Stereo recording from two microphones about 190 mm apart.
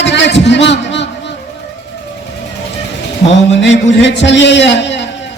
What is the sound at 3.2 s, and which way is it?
A man's voice, 70° left (ahead or behind).